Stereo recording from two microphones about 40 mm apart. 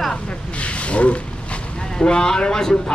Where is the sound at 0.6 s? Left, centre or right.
Left.